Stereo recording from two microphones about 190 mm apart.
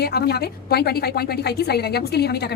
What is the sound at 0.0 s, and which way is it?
Speech, 55° left (ahead or behind).